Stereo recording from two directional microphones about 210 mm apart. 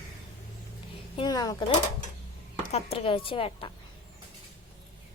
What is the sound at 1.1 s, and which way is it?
Speech, 20° left (ahead or behind).